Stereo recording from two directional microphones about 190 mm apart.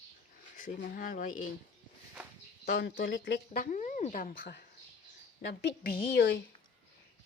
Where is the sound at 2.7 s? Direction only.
60° left (ahead or behind).